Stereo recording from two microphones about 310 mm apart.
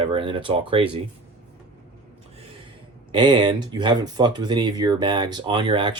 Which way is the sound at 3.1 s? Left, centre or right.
Centre.